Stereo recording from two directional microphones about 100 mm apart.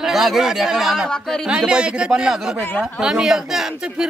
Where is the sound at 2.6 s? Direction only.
15° left (ahead or behind).